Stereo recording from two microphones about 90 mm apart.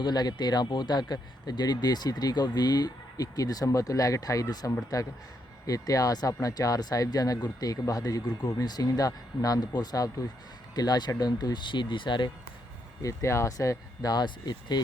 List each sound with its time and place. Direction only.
0.0 s speech: 50° left (ahead or behind)
13.0 s speech: 35° left (ahead or behind); by 14.8 s 55° left (ahead or behind)